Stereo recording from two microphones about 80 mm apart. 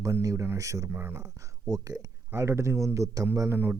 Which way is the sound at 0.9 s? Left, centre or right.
Right.